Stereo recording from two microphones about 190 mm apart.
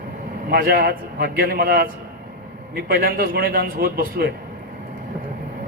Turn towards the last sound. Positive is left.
turn(degrees=-50)  # may be behind; listen again after turning